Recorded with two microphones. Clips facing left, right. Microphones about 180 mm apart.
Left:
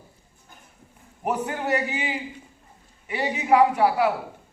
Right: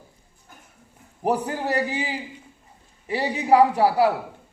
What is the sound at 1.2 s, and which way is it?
A man's voice, 35° right (ahead or behind).